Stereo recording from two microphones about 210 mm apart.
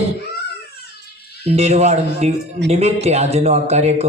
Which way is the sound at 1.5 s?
30° right (ahead or behind).